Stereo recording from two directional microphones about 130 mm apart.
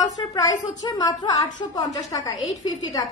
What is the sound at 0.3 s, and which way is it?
A woman's voice, 30° left (ahead or behind).